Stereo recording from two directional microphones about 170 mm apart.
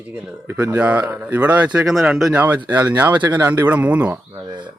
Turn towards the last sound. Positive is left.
turn(degrees=-10)  # may be behind; listen again after turning